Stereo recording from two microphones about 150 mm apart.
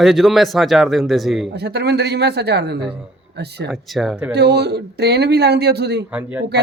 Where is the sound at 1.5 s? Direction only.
90° right.